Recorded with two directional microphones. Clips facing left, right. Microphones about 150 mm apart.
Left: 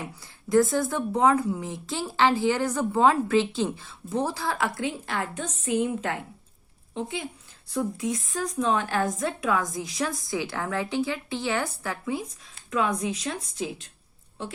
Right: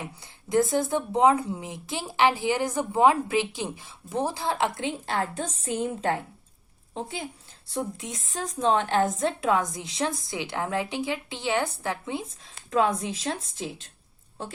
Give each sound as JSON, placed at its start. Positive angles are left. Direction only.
{"t": 0.2, "sound": "a woman's voice", "side_deg": -20}